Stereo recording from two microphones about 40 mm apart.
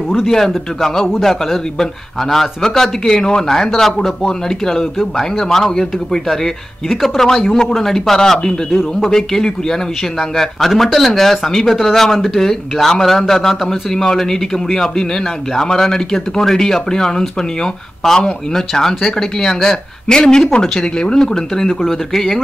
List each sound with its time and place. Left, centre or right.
1.2 s a man's voice: centre
3.1 s a man's voice: centre